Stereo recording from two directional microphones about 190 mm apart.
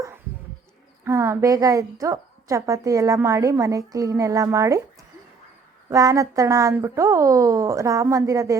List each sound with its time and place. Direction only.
1.0 s a woman's voice: 15° right (ahead or behind)